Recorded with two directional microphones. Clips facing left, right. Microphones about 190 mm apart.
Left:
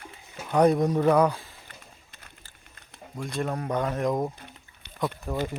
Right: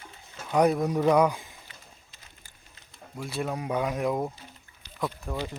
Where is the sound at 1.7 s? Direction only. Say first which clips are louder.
Left 3 dB; 60° left (ahead or behind).